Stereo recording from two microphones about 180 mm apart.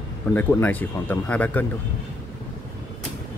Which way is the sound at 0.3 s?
10° left (ahead or behind).